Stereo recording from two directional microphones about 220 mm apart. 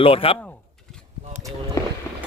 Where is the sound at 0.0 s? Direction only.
25° left (ahead or behind).